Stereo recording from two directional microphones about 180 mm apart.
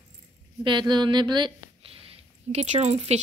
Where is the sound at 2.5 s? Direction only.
40° right (ahead or behind).